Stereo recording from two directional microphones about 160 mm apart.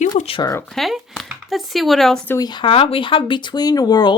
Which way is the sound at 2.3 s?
25° left (ahead or behind).